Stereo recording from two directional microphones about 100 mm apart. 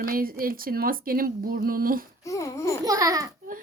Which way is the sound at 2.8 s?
40° right (ahead or behind).